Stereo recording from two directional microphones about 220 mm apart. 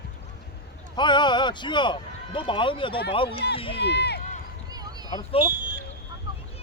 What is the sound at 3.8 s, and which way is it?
Speech, 50° left (ahead or behind).